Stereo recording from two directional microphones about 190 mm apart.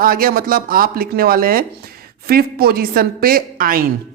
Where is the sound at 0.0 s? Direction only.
50° right (ahead or behind).